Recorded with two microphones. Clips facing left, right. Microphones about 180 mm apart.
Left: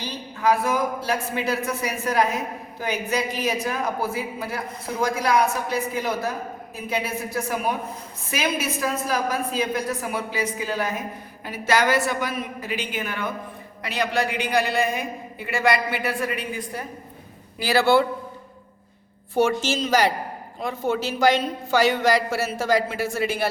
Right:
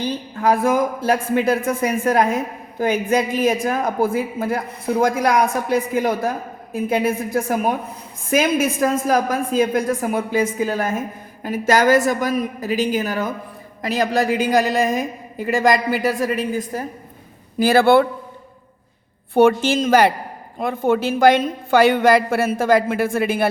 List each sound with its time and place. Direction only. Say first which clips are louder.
0.0 s a woman's voice: right 4 dB; 50° right (ahead or behind)
19.3 s a woman's voice: right 7 dB; 60° right (ahead or behind)